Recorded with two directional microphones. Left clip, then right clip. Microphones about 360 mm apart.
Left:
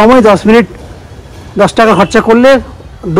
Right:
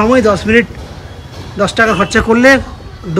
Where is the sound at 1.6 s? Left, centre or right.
Centre.